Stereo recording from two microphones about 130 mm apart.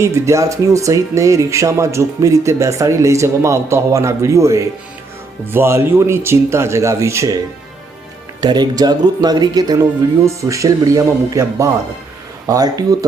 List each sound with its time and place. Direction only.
0.0 s speech: 25° right (ahead or behind)
8.4 s speech: 35° right (ahead or behind)